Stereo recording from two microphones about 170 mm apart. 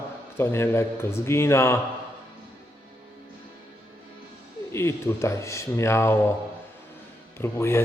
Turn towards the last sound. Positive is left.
turn(degrees=15)  # may be behind; listen again after turning